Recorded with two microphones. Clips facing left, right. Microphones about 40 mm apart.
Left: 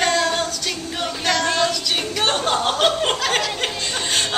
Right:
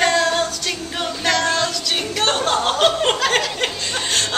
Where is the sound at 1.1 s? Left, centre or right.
Centre.